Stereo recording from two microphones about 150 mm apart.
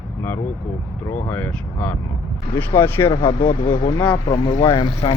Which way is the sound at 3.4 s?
75° left (ahead or behind).